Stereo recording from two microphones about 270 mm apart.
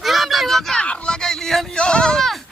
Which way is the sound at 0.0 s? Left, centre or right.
Centre.